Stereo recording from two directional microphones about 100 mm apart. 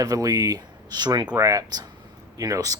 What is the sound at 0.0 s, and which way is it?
Speech, 35° right (ahead or behind).